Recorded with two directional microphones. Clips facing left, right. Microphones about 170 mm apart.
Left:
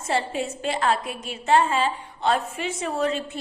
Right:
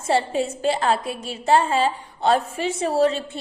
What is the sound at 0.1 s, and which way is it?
A woman's voice, 30° right (ahead or behind).